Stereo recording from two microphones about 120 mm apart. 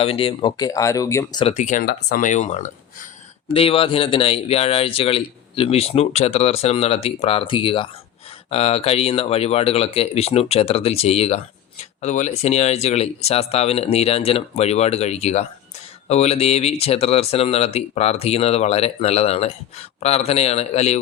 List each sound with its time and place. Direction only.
0.0 s a man's voice: 55° left (ahead or behind)
0.5 s speech: 30° left (ahead or behind)
1.5 s speech: 85° left
3.5 s a man's voice: 50° left (ahead or behind)
8.4 s speech: 55° left (ahead or behind)
12.0 s speech: 75° left (ahead or behind)